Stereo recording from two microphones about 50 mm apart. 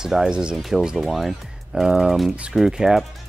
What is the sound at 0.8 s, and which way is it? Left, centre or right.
Speech, centre.